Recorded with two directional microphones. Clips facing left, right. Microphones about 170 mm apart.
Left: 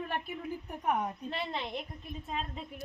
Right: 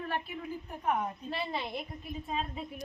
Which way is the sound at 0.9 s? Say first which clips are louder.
Even; 5° right (ahead or behind).